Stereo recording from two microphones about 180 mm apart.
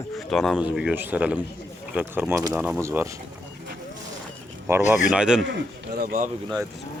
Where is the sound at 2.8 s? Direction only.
15° right (ahead or behind).